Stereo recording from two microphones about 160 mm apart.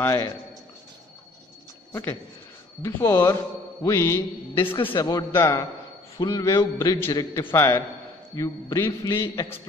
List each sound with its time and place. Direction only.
0.0 s a man's voice: 15° left (ahead or behind)
1.9 s a man's voice: 15° left (ahead or behind)